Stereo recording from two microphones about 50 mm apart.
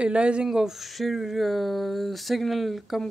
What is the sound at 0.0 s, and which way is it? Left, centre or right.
Speech, right.